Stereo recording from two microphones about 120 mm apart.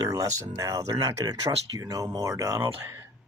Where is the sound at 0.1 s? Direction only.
30° right (ahead or behind).